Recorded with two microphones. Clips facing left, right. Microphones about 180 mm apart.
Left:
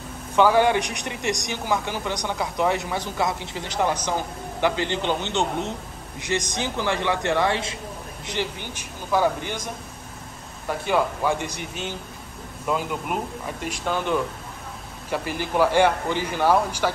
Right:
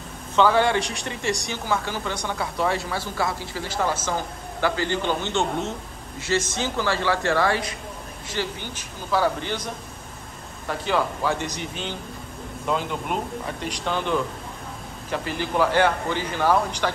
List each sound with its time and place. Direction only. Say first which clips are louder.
0.4 s a man's voice: left 1 dB; 10° left (ahead or behind)
10.7 s a man's voice: left 1 dB; 10° left (ahead or behind)
12.6 s a man's voice: even; 5° left (ahead or behind)